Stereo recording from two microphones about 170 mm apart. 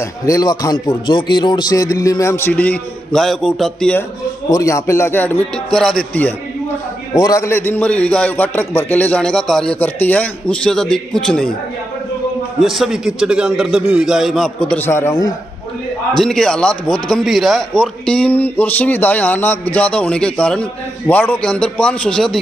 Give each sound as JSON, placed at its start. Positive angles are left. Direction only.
{"t": 0.2, "sound": "speech", "side_deg": 20}
{"t": 4.5, "sound": "speech", "side_deg": 20}
{"t": 7.2, "sound": "a man's voice", "side_deg": 20}
{"t": 12.6, "sound": "a man's voice", "side_deg": 0}
{"t": 16.2, "sound": "a man's voice", "side_deg": 5}